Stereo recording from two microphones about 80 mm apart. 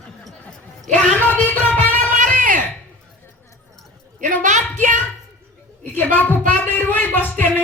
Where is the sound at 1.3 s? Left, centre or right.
Left.